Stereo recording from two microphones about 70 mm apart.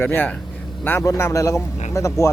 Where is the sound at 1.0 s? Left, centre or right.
Left.